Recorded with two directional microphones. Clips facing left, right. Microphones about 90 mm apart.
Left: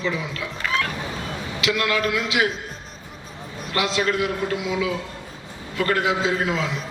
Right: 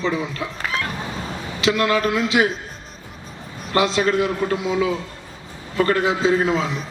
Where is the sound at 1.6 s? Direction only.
35° right (ahead or behind).